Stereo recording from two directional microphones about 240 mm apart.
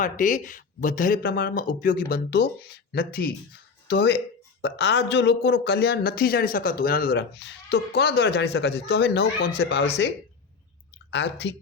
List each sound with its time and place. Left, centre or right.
0.0 s speech: left
11.1 s speech: left